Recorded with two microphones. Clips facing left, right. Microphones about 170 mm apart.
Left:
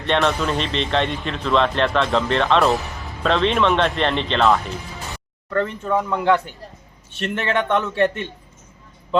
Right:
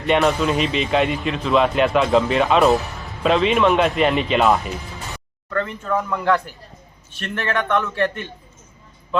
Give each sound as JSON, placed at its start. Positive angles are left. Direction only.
{"t": 0.0, "sound": "speech", "side_deg": -5}
{"t": 5.8, "sound": "a man's voice", "side_deg": 20}